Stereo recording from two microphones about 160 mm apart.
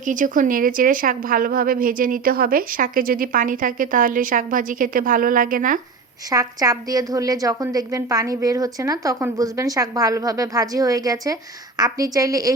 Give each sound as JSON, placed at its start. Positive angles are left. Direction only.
{"t": 0.0, "sound": "a woman's voice", "side_deg": -55}
{"t": 6.3, "sound": "a woman's voice", "side_deg": -20}